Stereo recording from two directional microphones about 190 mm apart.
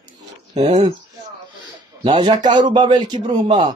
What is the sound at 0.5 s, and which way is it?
Speech, 35° right (ahead or behind).